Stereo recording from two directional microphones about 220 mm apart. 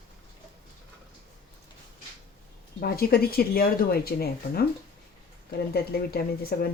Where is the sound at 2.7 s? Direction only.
45° left (ahead or behind).